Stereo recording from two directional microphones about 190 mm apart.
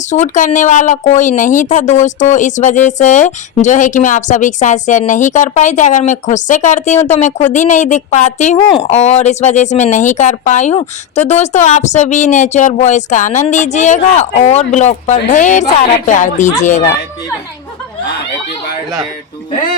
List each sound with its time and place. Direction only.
0.1 s speech: 40° left (ahead or behind)
8.5 s speech: 30° left (ahead or behind)